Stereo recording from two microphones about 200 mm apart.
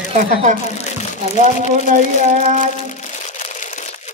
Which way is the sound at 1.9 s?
40° right (ahead or behind).